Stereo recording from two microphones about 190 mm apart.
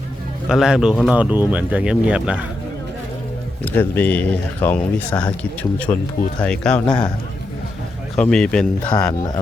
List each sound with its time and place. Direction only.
0.4 s speech: 5° right (ahead or behind)
3.6 s speech: 10° left (ahead or behind)
8.1 s speech: 5° left (ahead or behind)
9.0 s speech: 20° left (ahead or behind)